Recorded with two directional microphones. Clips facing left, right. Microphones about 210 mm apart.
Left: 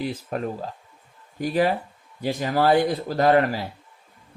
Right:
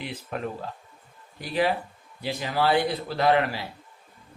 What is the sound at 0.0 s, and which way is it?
Speech, 40° left (ahead or behind).